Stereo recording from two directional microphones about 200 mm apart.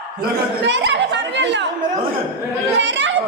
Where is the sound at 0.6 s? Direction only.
60° right (ahead or behind).